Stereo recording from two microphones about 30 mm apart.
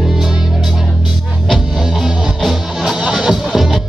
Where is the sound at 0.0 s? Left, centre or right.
Centre.